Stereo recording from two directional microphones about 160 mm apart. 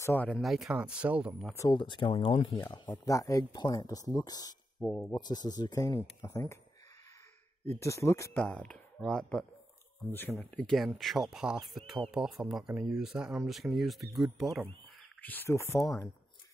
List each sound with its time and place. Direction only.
0.0 s speech: 10° left (ahead or behind); by 1.3 s 10° right (ahead or behind)
1.5 s speech: 20° left (ahead or behind)
1.8 s speech: 30° left (ahead or behind)
3.1 s speech: 20° left (ahead or behind)
4.7 s speech: 5° left (ahead or behind)
5.1 s speech: 25° left (ahead or behind)
7.8 s speech: 20° left (ahead or behind); by 14.6 s centre (ahead or behind)
15.2 s speech: 15° left (ahead or behind)